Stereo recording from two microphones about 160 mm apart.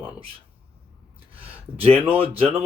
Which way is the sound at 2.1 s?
35° right (ahead or behind).